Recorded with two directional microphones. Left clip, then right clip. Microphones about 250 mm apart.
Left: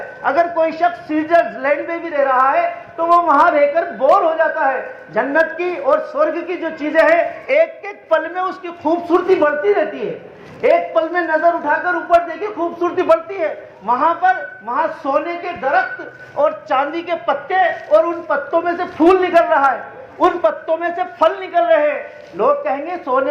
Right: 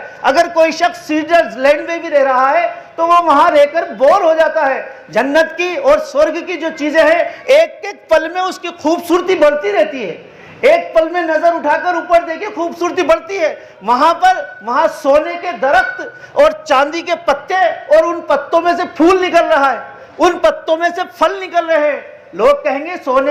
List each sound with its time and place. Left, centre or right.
0.2 s a man's voice: right